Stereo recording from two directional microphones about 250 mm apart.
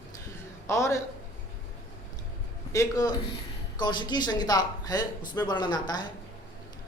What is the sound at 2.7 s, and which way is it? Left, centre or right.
Speech, centre.